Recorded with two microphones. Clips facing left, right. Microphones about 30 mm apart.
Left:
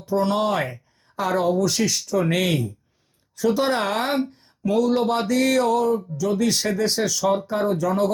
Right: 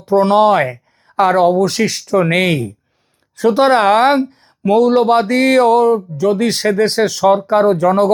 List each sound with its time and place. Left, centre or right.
0.0 s speech: right